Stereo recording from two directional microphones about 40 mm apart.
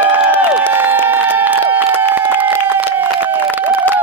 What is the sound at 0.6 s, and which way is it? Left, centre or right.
Run, right.